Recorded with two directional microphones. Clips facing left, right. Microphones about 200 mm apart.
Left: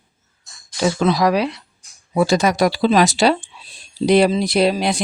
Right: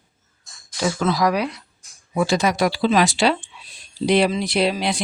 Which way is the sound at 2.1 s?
40° left (ahead or behind).